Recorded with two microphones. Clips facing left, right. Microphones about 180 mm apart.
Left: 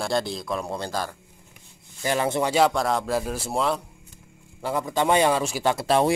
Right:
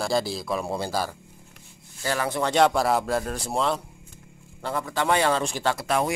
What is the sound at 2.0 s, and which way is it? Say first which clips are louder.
Speech: left 3 dB; 20° left (ahead or behind).